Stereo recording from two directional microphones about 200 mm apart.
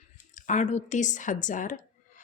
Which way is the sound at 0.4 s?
35° left (ahead or behind).